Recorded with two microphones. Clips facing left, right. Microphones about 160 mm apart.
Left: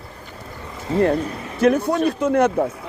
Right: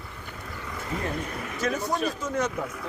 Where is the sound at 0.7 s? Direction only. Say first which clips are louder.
Left 13 dB; 30° left (ahead or behind).